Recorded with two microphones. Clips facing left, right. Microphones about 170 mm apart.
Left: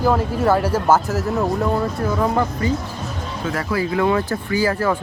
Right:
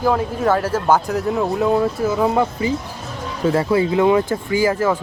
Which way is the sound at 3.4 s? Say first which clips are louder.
Right 6 dB; 25° right (ahead or behind).